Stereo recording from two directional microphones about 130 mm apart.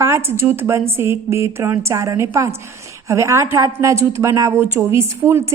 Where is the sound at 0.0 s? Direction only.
20° right (ahead or behind).